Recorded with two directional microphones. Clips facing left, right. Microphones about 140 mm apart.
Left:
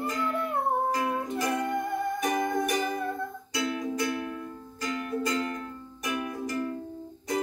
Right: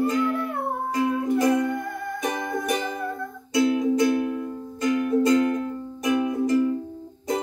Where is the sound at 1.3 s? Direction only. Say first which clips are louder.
Right 9 dB; 25° right (ahead or behind).